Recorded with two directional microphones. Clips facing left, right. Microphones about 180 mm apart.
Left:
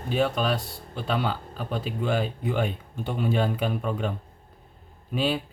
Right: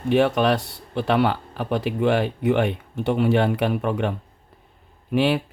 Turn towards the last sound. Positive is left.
turn(degrees=-70)  # may be behind; listen again after turning